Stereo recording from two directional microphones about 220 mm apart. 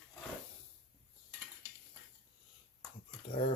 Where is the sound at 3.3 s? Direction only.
25° left (ahead or behind).